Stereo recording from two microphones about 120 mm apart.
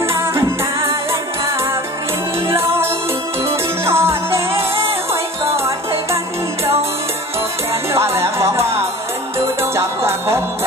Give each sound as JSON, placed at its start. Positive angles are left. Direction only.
{"t": 0.0, "sound": "music", "side_deg": -20}
{"t": 2.4, "sound": "music", "side_deg": -20}
{"t": 7.9, "sound": "music", "side_deg": -20}